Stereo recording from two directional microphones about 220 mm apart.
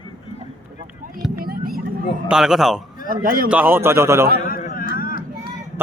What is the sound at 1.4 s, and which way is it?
Vehicle, 45° right (ahead or behind).